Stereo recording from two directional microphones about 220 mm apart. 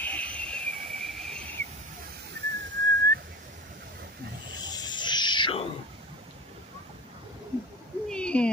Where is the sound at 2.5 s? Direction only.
55° right (ahead or behind).